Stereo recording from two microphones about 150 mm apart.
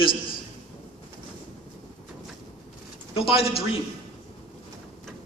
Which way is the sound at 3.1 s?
40° left (ahead or behind).